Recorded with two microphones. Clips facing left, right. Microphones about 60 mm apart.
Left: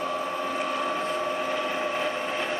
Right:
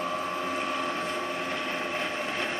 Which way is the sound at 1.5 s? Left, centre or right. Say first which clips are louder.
Left 4 dB; centre.